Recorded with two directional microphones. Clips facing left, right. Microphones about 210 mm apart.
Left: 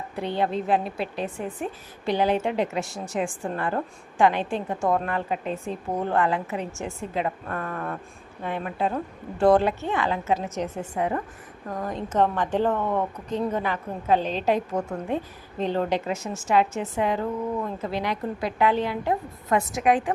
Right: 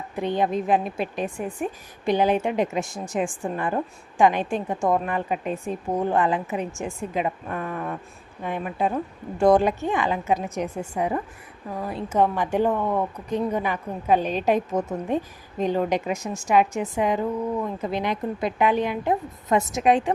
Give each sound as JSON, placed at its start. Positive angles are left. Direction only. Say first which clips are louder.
{"t": 0.2, "sound": "a woman's voice", "louder": "right 2 dB", "side_deg": -15}